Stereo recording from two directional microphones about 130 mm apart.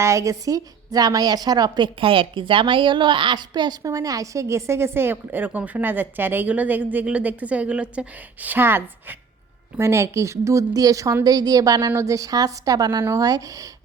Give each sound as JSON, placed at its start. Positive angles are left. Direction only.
{"t": 0.0, "sound": "a woman's voice", "side_deg": -25}